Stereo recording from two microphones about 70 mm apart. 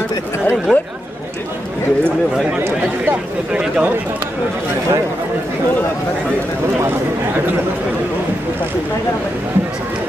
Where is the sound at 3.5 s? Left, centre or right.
Centre.